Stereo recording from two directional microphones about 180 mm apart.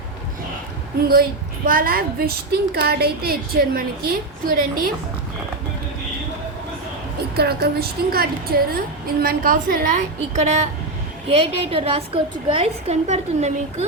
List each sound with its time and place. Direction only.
1.6 s a woman's voice: 55° right (ahead or behind)
7.2 s a woman's voice: 60° right (ahead or behind); by 13.8 s 35° right (ahead or behind)